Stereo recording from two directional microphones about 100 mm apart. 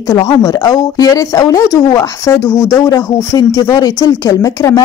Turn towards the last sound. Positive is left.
turn(degrees=35)  # may be behind; listen again after turning